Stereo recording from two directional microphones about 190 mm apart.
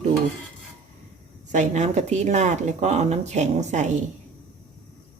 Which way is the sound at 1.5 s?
40° right (ahead or behind).